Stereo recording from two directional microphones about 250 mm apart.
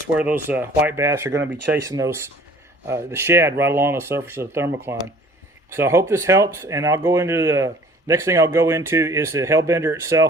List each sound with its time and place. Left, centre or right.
0.2 s speech: centre